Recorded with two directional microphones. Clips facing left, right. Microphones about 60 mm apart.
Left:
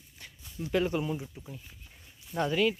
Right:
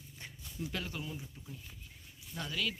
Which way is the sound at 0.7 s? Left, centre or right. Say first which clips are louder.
Left 15 dB; left.